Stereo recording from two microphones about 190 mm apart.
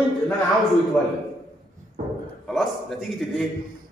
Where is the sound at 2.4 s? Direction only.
Centre (ahead or behind).